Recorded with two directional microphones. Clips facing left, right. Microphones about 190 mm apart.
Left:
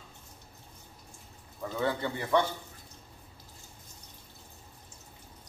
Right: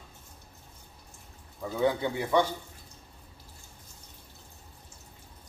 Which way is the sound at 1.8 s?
15° right (ahead or behind).